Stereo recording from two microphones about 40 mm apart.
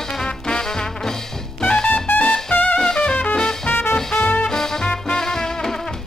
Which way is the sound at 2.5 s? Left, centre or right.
Left.